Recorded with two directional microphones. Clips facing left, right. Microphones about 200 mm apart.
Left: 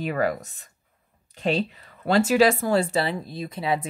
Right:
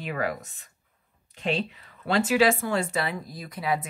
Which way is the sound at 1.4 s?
40° left (ahead or behind).